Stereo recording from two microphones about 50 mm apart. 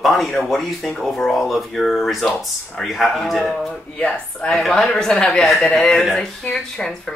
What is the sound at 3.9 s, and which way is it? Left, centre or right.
Speech, centre.